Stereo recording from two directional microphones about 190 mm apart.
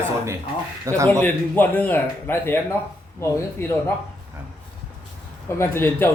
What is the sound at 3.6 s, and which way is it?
Speech, 10° left (ahead or behind).